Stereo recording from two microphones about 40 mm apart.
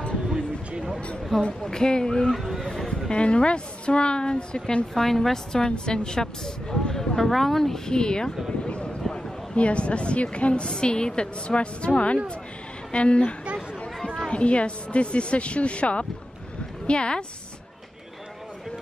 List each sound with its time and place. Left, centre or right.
1.6 s a woman's voice: centre
2.6 s a sound: centre
3.1 s a woman's voice: left
4.9 s a woman's voice: centre
8.6 s a sound: left
9.1 s a woman's voice: left
14.3 s a woman's voice: left